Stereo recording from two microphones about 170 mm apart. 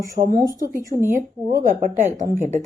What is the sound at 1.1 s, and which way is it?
A woman's voice, 50° right (ahead or behind).